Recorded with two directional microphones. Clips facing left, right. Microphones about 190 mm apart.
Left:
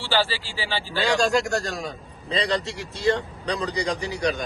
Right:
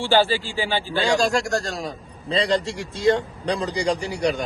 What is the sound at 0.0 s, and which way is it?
Speech, 50° right (ahead or behind).